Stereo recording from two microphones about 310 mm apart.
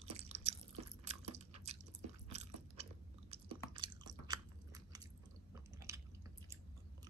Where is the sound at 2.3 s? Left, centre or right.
Right.